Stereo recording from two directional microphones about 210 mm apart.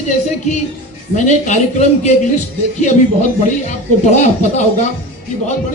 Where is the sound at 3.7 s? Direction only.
35° left (ahead or behind).